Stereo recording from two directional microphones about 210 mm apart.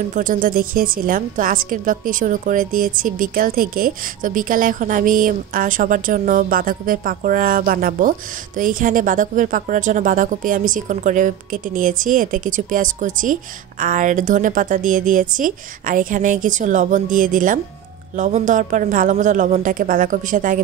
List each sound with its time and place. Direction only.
0.1 s a woman's voice: 40° right (ahead or behind)